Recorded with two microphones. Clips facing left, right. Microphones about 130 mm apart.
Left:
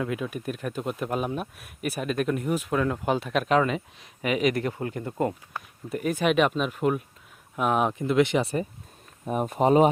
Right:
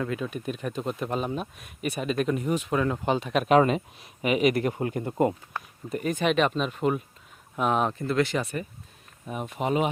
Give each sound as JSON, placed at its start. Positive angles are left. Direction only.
{"t": 0.0, "sound": "speech", "side_deg": 5}
{"t": 3.6, "sound": "speech", "side_deg": -25}
{"t": 4.0, "sound": "speech", "side_deg": -5}
{"t": 5.5, "sound": "speech", "side_deg": 5}
{"t": 9.2, "sound": "speech", "side_deg": 45}